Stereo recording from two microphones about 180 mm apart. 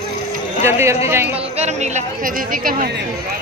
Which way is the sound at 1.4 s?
35° right (ahead or behind).